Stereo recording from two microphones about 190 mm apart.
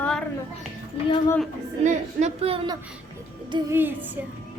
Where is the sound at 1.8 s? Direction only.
35° right (ahead or behind).